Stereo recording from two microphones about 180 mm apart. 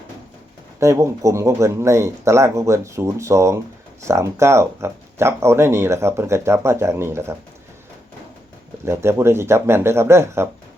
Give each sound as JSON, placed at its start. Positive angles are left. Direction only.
{"t": 0.8, "sound": "speech", "side_deg": -15}
{"t": 8.8, "sound": "speech", "side_deg": -15}